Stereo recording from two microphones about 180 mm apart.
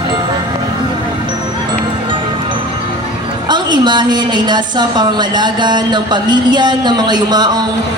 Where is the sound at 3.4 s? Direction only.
25° right (ahead or behind).